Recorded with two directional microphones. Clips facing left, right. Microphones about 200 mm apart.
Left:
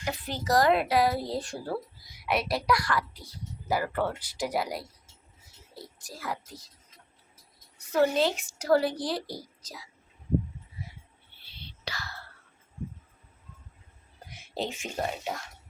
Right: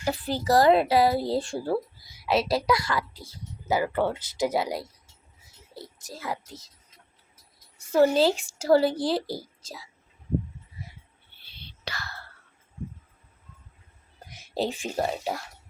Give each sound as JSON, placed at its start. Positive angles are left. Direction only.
{"t": 0.0, "sound": "speech", "side_deg": -35}
{"t": 6.0, "sound": "speech", "side_deg": -25}
{"t": 7.8, "sound": "speech", "side_deg": -30}
{"t": 11.9, "sound": "whispering", "side_deg": -60}
{"t": 14.3, "sound": "speech", "side_deg": -35}